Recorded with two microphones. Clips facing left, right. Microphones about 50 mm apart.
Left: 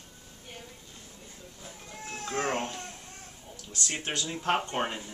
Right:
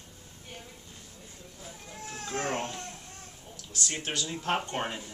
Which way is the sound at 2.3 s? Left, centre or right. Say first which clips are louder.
Left 1 dB; centre.